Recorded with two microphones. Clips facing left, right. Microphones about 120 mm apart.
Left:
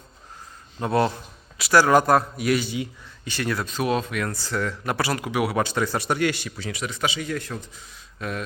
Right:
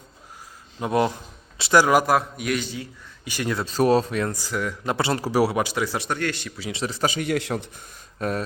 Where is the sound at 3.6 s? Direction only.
35° right (ahead or behind).